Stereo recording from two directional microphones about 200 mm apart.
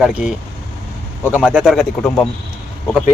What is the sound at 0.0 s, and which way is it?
Speech, 5° right (ahead or behind).